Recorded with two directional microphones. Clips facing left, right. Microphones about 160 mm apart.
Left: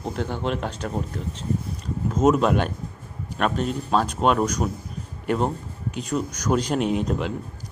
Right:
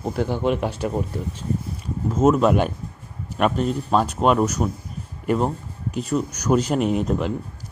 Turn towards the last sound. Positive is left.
turn(degrees=-5)  # may be behind; listen again after turning